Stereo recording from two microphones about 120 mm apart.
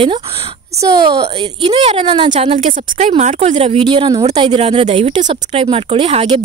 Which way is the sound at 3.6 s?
50° right (ahead or behind).